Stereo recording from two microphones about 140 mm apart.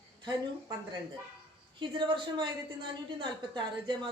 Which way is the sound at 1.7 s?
35° right (ahead or behind).